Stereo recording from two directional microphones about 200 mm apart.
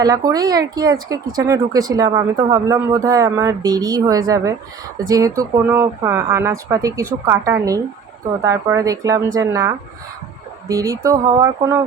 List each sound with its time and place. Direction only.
0.3 s speech: 20° right (ahead or behind)